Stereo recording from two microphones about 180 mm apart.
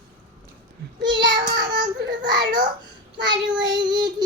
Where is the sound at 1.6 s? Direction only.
25° right (ahead or behind).